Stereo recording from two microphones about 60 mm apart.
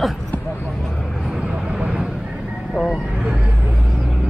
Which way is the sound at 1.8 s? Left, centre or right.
Centre.